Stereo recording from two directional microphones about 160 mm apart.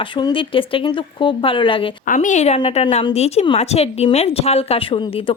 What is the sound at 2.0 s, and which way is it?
Speech, 50° left (ahead or behind).